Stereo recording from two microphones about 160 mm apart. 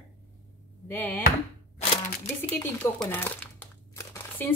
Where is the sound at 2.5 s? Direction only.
10° left (ahead or behind).